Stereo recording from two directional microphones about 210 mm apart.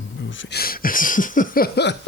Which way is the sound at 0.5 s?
45° left (ahead or behind).